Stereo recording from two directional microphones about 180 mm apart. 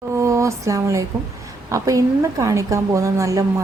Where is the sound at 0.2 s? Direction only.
15° right (ahead or behind).